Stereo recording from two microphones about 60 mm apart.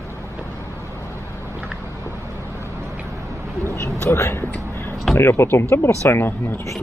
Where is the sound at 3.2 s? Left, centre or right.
Right.